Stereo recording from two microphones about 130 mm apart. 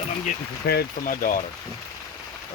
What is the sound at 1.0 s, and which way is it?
Speech, 90° left.